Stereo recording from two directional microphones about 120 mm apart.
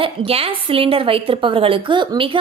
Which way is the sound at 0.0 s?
50° right (ahead or behind).